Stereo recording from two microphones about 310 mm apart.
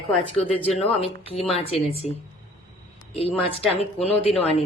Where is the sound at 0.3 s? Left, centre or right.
Centre.